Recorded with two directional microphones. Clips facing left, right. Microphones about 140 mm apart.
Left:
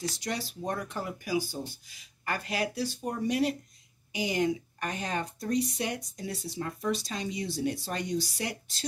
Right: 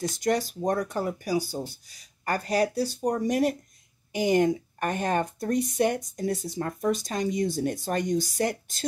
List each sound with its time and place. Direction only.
0.0 s speech: 50° right (ahead or behind)